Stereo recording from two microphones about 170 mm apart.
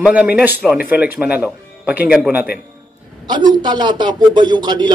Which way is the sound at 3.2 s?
25° right (ahead or behind).